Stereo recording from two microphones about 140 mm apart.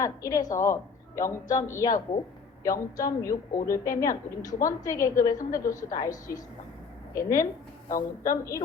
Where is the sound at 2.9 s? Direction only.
25° left (ahead or behind).